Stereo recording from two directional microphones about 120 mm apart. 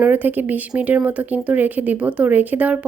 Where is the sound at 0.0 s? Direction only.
15° right (ahead or behind).